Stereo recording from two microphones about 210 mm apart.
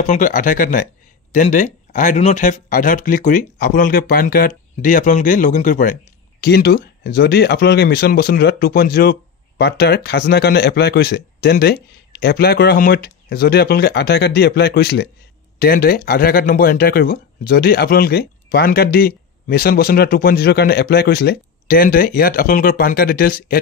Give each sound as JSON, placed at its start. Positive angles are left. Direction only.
{"t": 0.0, "sound": "speech", "side_deg": 40}
{"t": 6.4, "sound": "speech", "side_deg": 50}